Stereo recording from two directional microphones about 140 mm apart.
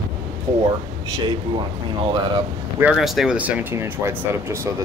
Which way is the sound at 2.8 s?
Centre (ahead or behind).